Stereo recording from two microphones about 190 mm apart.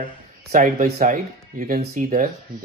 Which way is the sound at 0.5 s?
45° right (ahead or behind).